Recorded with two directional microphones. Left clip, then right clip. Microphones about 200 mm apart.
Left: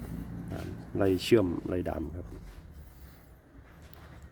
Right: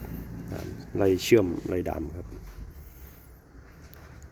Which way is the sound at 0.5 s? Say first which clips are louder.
Right 4 dB; 10° left (ahead or behind).